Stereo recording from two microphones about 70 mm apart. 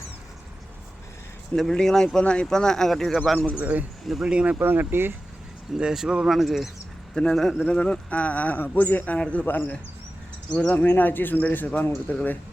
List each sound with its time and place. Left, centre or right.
1.5 s speech: centre
3.5 s speech: right
4.5 s speech: right
5.7 s speech: centre; by 9.1 s left
9.1 s speech: centre
9.5 s speech: left
10.5 s speech: centre
10.8 s speech: left